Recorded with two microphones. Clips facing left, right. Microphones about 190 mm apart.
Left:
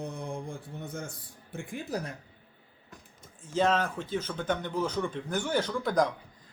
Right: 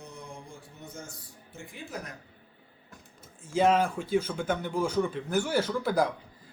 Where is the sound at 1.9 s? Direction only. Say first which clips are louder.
Left 5 dB; 35° left (ahead or behind).